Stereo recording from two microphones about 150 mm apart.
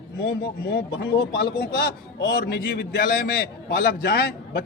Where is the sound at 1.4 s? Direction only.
90° left.